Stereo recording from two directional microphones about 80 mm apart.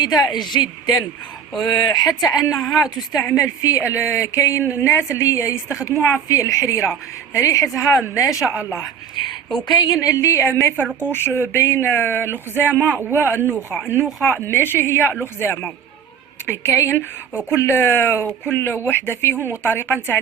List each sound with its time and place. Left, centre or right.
0.0 s speech: left
4.6 s a woman's voice: right
4.9 s speech: left
9.6 s speech: left
10.0 s speech: left